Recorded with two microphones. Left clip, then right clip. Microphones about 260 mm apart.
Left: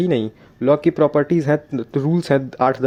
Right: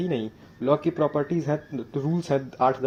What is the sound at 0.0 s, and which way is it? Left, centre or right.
Speech, left.